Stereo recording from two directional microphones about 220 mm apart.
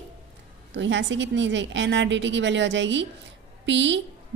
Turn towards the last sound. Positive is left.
turn(degrees=-55)  # may be behind; listen again after turning